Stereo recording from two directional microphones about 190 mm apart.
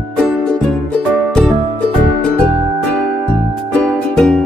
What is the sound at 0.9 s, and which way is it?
Music, 5° left (ahead or behind).